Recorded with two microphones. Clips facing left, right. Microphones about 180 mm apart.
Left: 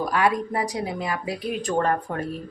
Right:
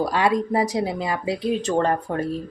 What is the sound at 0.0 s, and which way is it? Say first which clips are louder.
Speech: right 2 dB; 25° right (ahead or behind).